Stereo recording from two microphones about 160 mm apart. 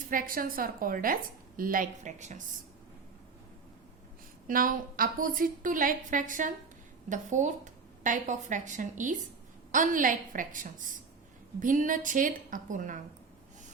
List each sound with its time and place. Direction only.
0.1 s a woman's voice: 60° right (ahead or behind)
4.4 s a woman's voice: 60° right (ahead or behind)